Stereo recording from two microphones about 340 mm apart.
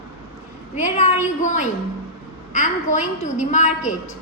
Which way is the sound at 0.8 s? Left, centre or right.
Left.